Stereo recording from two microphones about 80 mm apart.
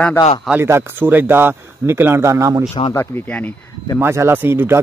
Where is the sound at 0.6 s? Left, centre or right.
Right.